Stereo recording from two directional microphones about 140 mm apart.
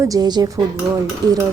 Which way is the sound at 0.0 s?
25° right (ahead or behind).